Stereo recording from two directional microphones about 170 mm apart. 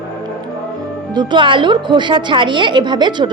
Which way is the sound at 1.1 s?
25° right (ahead or behind).